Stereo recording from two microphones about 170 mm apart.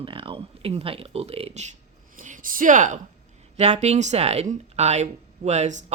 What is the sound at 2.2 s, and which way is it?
Speech, 50° right (ahead or behind).